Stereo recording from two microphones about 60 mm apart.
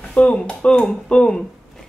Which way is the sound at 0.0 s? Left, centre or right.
Left.